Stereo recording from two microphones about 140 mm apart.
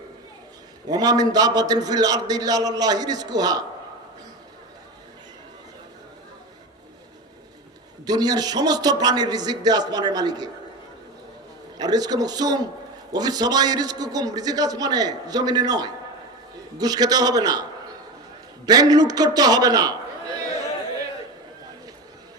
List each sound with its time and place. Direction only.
0.9 s a man's voice: 25° right (ahead or behind)
8.0 s a man's voice: 30° right (ahead or behind)
11.8 s a man's voice: 30° right (ahead or behind)